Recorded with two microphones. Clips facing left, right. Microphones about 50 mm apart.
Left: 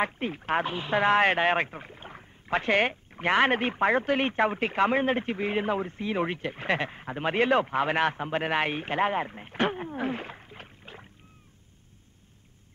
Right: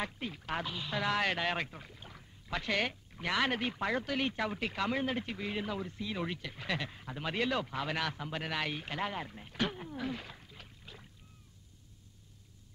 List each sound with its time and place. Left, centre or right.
0.0 s speech: left